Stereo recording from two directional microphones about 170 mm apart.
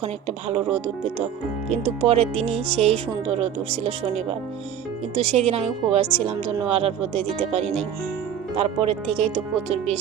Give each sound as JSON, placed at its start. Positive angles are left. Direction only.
{"t": 0.0, "sound": "speech", "side_deg": -40}